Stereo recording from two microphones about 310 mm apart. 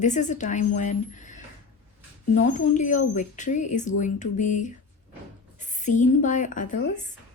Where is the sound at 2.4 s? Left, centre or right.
Left.